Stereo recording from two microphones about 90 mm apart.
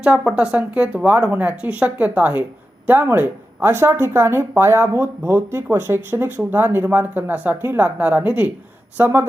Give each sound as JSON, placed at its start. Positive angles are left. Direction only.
{"t": 0.0, "sound": "speech", "side_deg": -10}